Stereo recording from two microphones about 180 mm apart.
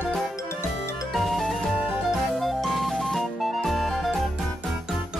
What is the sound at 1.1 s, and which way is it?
Music, centre (ahead or behind).